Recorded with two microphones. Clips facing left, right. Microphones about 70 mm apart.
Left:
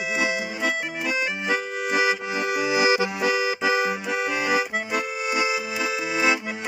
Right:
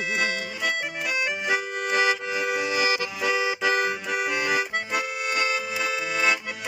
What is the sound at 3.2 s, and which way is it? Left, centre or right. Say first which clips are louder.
Accordion: left 2 dB; centre.